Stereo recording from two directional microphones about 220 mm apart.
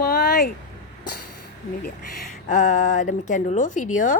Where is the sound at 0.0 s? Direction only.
40° left (ahead or behind).